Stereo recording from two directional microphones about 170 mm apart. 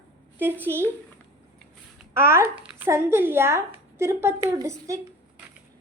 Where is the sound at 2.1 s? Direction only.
15° right (ahead or behind).